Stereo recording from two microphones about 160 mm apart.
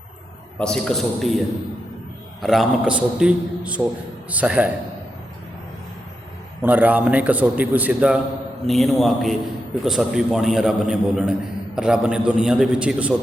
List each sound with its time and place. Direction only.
0.6 s a man's voice: 5° left (ahead or behind)
2.4 s a man's voice: centre (ahead or behind)
6.6 s a man's voice: 10° right (ahead or behind)